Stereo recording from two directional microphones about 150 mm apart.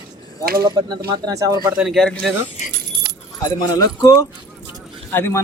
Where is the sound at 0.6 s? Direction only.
25° right (ahead or behind).